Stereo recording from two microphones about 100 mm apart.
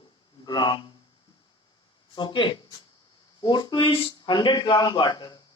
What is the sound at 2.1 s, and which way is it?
A man's voice, 50° left (ahead or behind).